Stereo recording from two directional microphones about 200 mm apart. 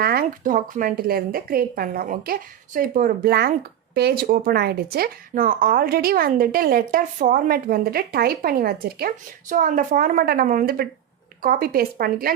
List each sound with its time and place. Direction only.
0.0 s speech: 50° right (ahead or behind)